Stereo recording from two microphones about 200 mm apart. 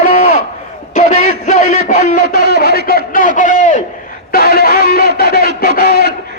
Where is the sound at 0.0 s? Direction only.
40° left (ahead or behind).